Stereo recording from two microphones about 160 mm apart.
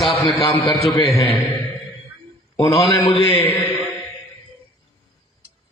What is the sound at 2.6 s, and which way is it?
A man's voice, 35° left (ahead or behind).